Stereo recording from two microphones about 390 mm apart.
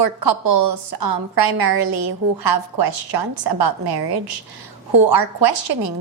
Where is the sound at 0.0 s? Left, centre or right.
Right.